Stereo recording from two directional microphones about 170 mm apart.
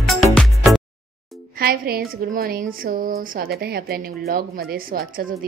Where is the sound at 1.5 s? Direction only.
60° right (ahead or behind).